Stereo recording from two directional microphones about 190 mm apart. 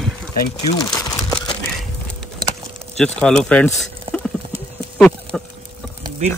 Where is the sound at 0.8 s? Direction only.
20° left (ahead or behind).